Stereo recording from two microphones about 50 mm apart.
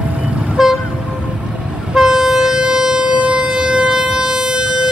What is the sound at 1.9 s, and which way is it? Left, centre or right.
Vehicle, centre.